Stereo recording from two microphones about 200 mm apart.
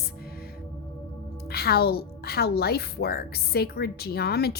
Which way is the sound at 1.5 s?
50° left (ahead or behind).